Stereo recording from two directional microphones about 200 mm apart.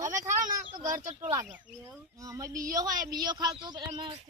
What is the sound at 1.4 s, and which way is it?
Speech, 10° right (ahead or behind).